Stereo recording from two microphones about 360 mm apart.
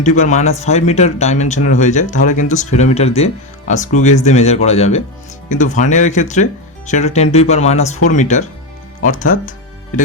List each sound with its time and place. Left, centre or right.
0.0 s speech: centre
9.0 s music: left